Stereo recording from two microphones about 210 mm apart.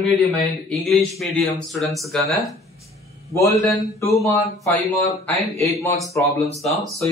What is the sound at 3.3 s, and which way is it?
A man's voice, 15° left (ahead or behind).